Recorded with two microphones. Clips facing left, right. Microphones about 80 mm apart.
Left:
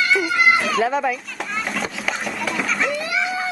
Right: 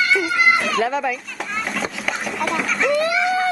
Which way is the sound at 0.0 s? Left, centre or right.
Centre.